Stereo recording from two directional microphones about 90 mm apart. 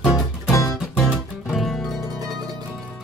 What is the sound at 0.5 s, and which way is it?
Music, 40° left (ahead or behind).